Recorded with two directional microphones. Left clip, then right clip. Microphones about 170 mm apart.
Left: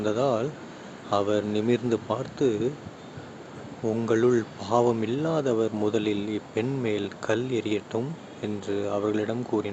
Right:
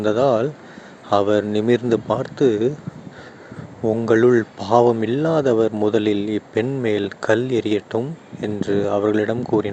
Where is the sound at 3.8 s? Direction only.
30° right (ahead or behind).